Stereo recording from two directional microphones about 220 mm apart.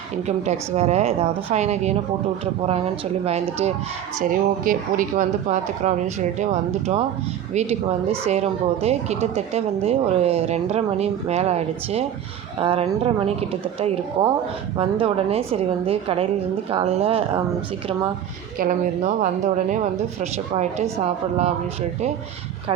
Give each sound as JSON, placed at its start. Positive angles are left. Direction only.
{"t": 0.3, "sound": "a woman's voice", "side_deg": -30}
{"t": 18.6, "sound": "speech", "side_deg": -35}
{"t": 21.0, "sound": "a woman's voice", "side_deg": -30}